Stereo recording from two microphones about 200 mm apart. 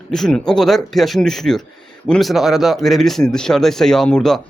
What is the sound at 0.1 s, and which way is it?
Speech, centre (ahead or behind).